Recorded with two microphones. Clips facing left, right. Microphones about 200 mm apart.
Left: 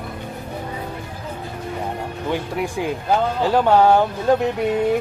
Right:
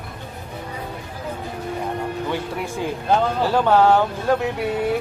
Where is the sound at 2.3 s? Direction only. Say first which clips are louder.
Left 2 dB; 15° left (ahead or behind).